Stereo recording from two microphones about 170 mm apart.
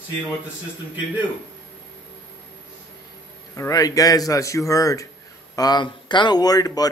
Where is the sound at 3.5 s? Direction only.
20° left (ahead or behind).